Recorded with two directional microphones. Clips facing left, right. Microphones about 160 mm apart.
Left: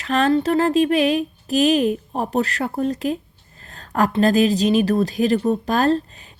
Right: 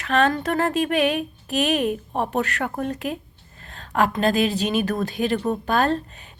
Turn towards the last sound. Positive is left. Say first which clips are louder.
# left 3 dB
turn(degrees=35)  # may be behind; listen again after turning